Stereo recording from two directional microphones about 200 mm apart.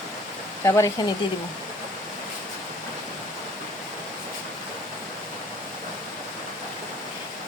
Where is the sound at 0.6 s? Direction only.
15° left (ahead or behind).